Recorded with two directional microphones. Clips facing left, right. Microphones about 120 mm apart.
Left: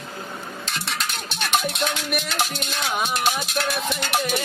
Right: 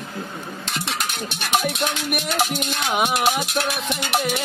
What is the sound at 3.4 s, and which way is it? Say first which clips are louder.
Music: right 1 dB; 55° right (ahead or behind).